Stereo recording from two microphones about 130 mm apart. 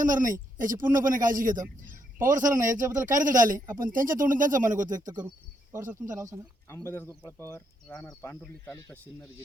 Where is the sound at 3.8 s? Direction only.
90° right.